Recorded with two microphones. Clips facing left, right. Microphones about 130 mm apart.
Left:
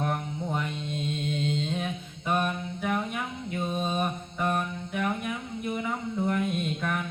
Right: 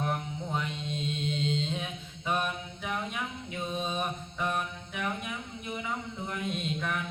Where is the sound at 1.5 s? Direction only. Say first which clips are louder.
Left 3 dB; 50° left (ahead or behind).